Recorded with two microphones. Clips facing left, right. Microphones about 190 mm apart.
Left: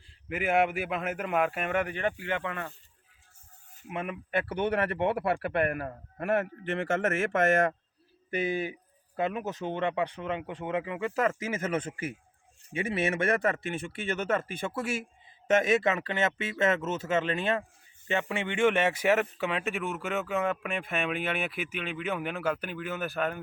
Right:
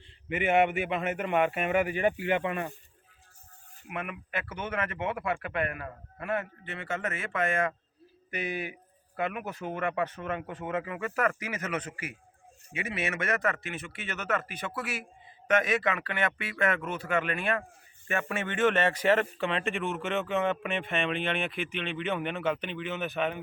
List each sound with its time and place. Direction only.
0.3 s speech: centre (ahead or behind); by 2.7 s 15° right (ahead or behind)
3.8 s speech: 30° left (ahead or behind)
8.3 s speech: 25° left (ahead or behind); by 23.4 s centre (ahead or behind)